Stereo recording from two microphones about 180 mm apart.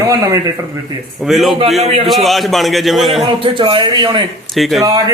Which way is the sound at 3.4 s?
25° right (ahead or behind).